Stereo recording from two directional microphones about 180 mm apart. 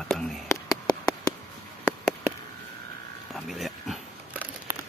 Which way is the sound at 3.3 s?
Centre (ahead or behind).